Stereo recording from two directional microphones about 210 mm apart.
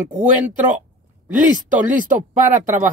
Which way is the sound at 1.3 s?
40° right (ahead or behind).